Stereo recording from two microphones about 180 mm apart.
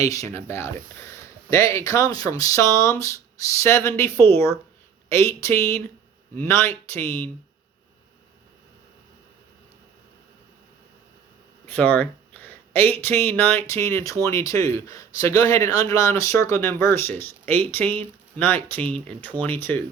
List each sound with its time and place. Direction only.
0.0 s a man's voice: 20° left (ahead or behind)
11.7 s a sound: 10° left (ahead or behind)
13.3 s a man's voice: 10° left (ahead or behind)